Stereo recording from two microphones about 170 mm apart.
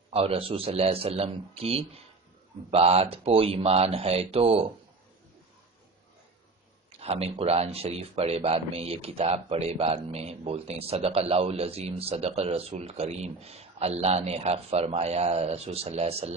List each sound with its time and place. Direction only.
0.1 s speech: 35° right (ahead or behind)
7.0 s speech: 35° right (ahead or behind)